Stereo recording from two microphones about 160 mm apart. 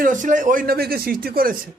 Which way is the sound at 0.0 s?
55° right (ahead or behind).